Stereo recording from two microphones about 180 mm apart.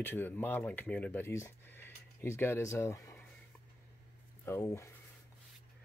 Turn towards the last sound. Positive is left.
turn(degrees=15)  # may be behind; listen again after turning